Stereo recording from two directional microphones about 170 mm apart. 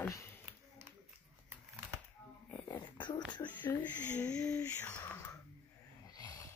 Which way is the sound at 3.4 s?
10° left (ahead or behind).